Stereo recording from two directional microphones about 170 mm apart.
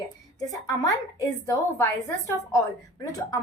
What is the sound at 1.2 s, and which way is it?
A woman's voice, 20° left (ahead or behind).